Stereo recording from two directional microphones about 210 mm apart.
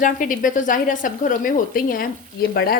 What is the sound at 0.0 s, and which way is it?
A woman's voice, 40° left (ahead or behind).